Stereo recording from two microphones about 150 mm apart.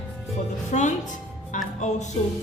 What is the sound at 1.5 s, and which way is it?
Music, 55° left (ahead or behind).